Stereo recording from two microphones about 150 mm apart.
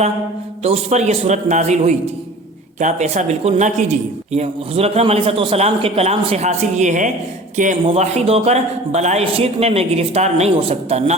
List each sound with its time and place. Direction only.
0.6 s a man's voice: 45° right (ahead or behind)
7.9 s a man's voice: 45° right (ahead or behind)